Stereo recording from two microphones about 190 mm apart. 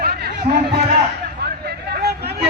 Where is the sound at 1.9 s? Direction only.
60° right (ahead or behind).